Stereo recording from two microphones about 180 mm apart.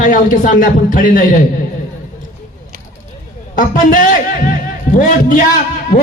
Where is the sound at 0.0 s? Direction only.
45° left (ahead or behind).